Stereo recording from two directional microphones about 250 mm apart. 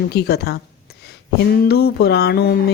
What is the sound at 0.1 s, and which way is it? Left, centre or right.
A woman's voice, left.